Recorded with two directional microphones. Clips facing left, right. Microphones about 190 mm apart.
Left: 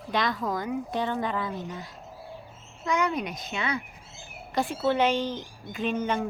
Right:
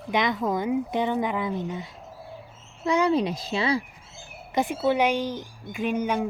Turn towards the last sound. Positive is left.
turn(degrees=-10)  # may be behind; listen again after turning